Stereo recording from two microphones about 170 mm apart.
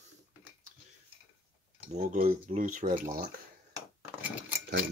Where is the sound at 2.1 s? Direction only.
55° right (ahead or behind).